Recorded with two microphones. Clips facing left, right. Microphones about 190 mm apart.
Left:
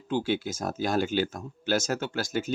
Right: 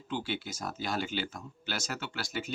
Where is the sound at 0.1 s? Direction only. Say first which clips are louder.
Left 8 dB; 45° left (ahead or behind).